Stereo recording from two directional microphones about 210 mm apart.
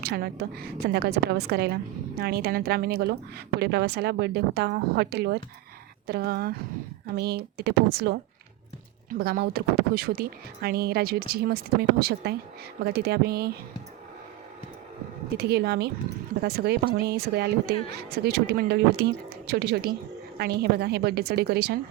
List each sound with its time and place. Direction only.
0.0 s a woman's voice: 50° right (ahead or behind)
15.4 s a woman's voice: 50° right (ahead or behind)